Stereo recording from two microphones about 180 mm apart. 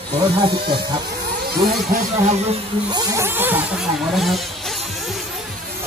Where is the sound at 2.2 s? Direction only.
35° right (ahead or behind).